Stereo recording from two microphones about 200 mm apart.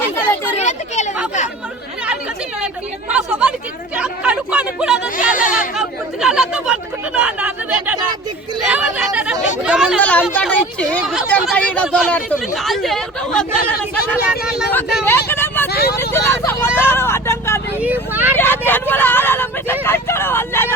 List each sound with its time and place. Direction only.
0.6 s speech: 35° left (ahead or behind)
3.1 s speech: 5° right (ahead or behind)
5.3 s speech: 40° left (ahead or behind)
5.7 s speech: 5° right (ahead or behind)
15.3 s vehicle: 10° left (ahead or behind)
15.7 s vehicle: 50° left (ahead or behind)
16.0 s vehicle: 10° left (ahead or behind)
17.7 s vehicle: 10° right (ahead or behind)
18.3 s vehicle: 10° left (ahead or behind)